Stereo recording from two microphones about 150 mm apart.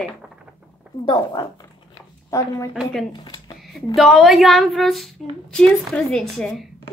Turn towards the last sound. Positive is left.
turn(degrees=5)  # may be behind; listen again after turning